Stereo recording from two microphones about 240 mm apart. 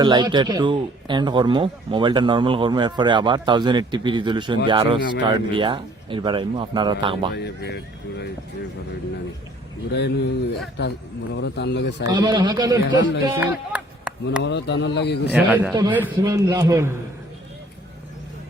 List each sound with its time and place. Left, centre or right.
0.0 s speech: centre
7.3 s speech: left
9.9 s speech: left
12.0 s speech: centre
14.4 s speech: left
15.4 s speech: centre